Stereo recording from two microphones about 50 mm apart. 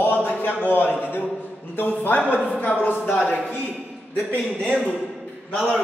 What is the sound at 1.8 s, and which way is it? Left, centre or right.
A woman's voice, left.